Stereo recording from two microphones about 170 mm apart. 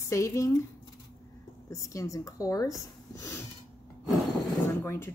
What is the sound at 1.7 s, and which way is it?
Speech, 20° left (ahead or behind).